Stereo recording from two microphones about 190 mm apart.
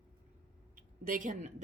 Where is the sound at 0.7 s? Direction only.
45° right (ahead or behind).